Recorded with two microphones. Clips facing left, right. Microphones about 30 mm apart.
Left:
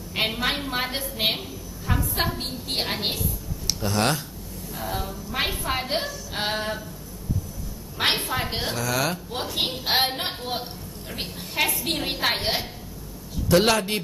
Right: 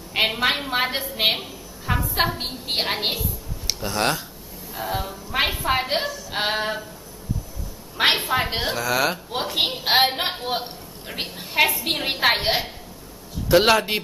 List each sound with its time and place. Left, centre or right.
0.1 s a woman's voice: centre
3.8 s speech: centre
4.7 s a woman's voice: centre
8.0 s a woman's voice: centre